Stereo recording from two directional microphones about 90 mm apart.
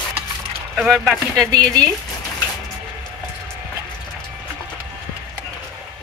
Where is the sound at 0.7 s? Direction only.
5° right (ahead or behind).